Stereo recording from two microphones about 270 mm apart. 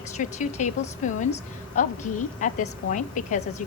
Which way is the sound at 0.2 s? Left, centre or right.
Left.